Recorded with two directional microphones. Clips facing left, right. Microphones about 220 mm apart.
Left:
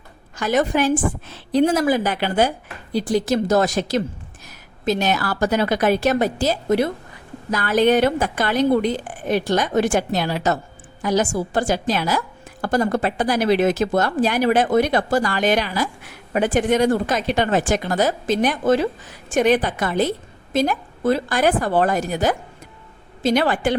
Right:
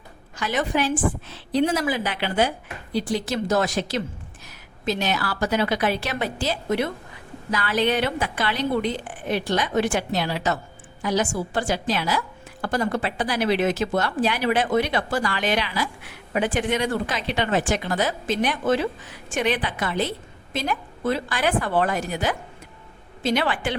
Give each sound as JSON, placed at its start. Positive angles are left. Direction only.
{"t": 0.3, "sound": "speech", "side_deg": 45}